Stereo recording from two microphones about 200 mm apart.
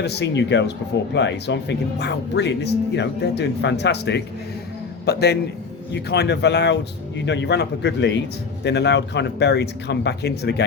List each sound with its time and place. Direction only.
0.0 s speech: 55° left (ahead or behind)